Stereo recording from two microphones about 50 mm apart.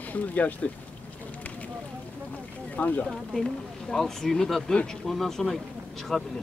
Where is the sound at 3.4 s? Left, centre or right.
Centre.